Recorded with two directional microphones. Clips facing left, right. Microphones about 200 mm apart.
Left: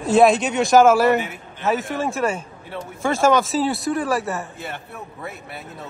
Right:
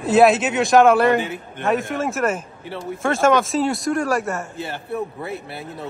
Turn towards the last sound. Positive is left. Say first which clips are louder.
# right 1 dB
turn(degrees=0)  # may be behind; listen again after turning